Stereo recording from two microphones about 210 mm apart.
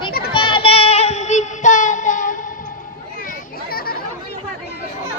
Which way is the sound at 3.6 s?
45° left (ahead or behind).